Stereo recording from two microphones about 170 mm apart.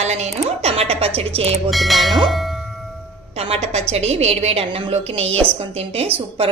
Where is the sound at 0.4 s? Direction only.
35° right (ahead or behind).